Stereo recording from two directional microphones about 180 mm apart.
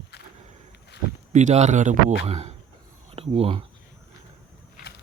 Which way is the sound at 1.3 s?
40° right (ahead or behind).